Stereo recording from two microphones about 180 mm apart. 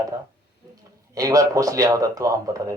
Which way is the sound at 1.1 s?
20° right (ahead or behind).